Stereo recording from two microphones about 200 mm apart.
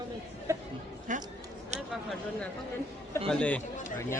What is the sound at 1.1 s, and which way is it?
Speech, 40° right (ahead or behind).